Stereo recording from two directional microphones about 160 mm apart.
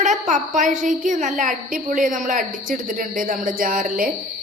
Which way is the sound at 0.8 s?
50° right (ahead or behind).